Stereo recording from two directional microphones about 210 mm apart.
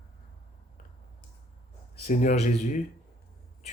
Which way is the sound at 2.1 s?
35° left (ahead or behind).